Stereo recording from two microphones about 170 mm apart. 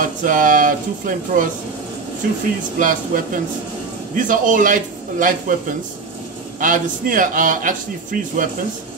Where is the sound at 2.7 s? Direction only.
50° right (ahead or behind).